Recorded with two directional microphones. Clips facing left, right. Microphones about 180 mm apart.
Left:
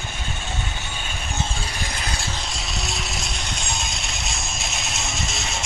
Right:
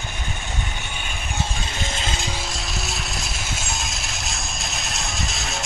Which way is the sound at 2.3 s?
Centre (ahead or behind).